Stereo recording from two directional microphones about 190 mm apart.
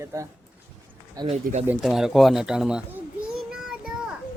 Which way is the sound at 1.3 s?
35° right (ahead or behind).